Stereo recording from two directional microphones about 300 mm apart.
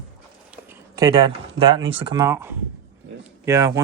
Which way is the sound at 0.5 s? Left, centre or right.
Centre.